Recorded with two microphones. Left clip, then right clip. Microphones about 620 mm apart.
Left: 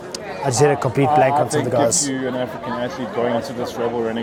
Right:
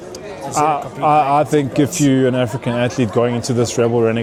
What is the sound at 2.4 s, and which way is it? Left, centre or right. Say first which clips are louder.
Speech: right 5 dB; right.